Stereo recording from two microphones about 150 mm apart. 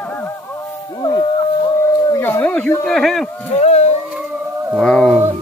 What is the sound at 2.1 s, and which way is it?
Howl, 15° left (ahead or behind).